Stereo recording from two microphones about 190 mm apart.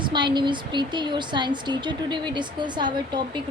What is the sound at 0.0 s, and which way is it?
Speech, 25° right (ahead or behind).